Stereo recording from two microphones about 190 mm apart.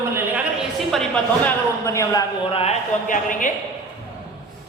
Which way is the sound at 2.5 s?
30° left (ahead or behind).